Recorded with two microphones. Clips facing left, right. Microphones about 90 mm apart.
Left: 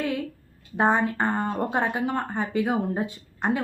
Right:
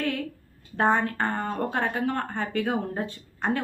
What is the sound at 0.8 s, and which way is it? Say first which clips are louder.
A woman's voice: left 1 dB; 15° left (ahead or behind).